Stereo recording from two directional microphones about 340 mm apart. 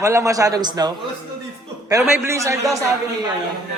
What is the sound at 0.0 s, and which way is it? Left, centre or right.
A man's voice, centre.